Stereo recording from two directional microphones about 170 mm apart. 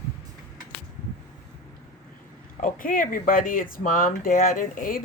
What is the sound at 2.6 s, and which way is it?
Speech, 55° left (ahead or behind).